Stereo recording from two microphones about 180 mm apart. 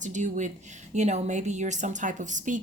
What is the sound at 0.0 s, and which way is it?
A woman's voice, 40° right (ahead or behind).